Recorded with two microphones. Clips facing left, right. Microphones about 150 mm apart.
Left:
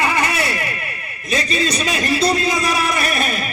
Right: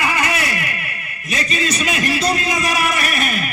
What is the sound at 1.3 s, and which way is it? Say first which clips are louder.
A man's voice: left 2 dB; 30° left (ahead or behind).